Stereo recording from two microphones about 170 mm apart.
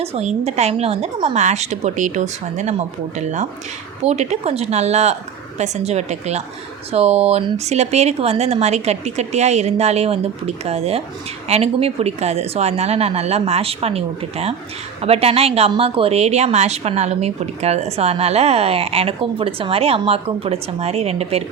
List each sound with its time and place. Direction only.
0.0 s a woman's voice: 40° right (ahead or behind)
4.1 s a woman's voice: 40° right (ahead or behind)